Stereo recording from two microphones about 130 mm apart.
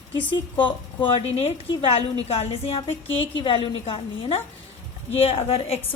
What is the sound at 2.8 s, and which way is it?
A woman's voice, 35° left (ahead or behind).